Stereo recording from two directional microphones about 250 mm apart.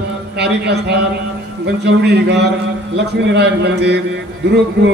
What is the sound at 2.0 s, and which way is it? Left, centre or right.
A man's voice, right.